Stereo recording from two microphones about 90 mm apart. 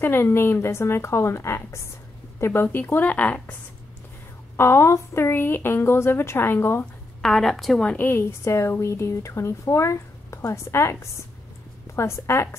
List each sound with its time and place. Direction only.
0.0 s a woman's voice: 25° left (ahead or behind)
4.6 s a woman's voice: 30° left (ahead or behind)
7.2 s a woman's voice: 5° left (ahead or behind)
8.1 s speech: 25° left (ahead or behind)